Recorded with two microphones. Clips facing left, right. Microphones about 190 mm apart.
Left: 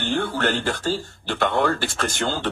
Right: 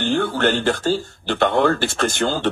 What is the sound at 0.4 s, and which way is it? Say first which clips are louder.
Speech: right 5 dB; 25° right (ahead or behind).